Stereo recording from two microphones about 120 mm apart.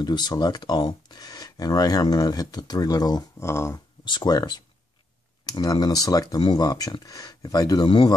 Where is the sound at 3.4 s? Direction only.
20° left (ahead or behind).